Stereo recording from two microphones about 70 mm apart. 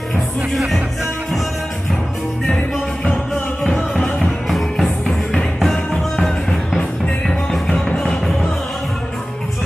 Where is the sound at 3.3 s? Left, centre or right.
Centre.